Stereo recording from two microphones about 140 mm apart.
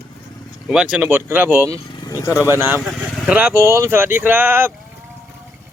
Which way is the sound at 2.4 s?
15° right (ahead or behind).